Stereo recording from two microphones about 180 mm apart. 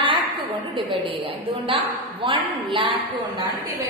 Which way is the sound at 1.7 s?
30° right (ahead or behind).